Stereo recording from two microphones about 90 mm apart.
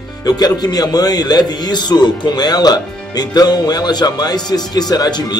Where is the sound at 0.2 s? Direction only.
50° left (ahead or behind).